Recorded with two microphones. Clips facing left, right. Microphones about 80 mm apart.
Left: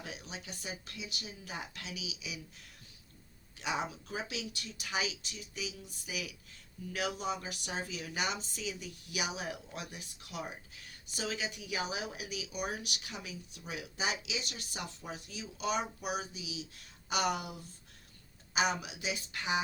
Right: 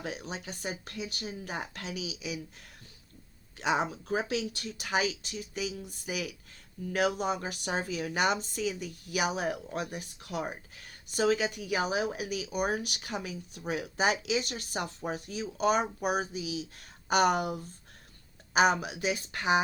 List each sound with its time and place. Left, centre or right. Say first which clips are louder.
0.0 s speech: right 7 dB; right
3.6 s speech: right 7 dB; right